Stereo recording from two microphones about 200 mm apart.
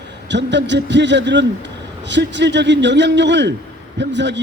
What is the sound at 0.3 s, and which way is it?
A man's voice, 60° right (ahead or behind).